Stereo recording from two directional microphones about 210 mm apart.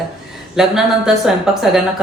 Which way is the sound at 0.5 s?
Centre (ahead or behind).